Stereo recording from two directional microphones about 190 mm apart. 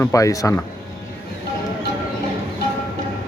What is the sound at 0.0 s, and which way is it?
Speech, 15° left (ahead or behind).